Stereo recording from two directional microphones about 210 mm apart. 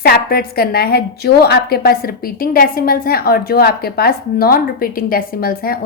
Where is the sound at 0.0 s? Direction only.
45° left (ahead or behind).